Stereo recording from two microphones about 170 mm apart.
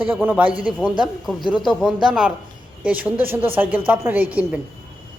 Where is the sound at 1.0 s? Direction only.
Centre (ahead or behind).